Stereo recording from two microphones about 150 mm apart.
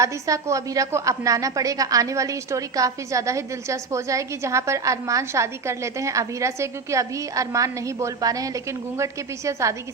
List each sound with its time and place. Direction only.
0.0 s a woman's voice: 20° right (ahead or behind)